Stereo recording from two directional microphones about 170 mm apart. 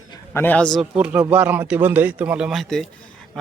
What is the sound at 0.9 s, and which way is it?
Speech, 5° right (ahead or behind).